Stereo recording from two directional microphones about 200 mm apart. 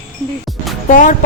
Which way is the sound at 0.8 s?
40° left (ahead or behind).